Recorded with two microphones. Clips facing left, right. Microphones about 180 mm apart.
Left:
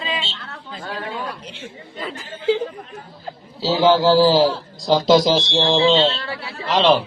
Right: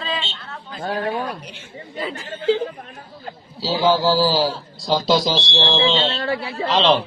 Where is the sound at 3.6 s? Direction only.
20° left (ahead or behind).